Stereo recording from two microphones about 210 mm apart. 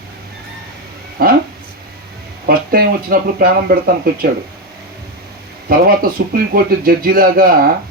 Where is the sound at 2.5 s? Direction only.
45° right (ahead or behind).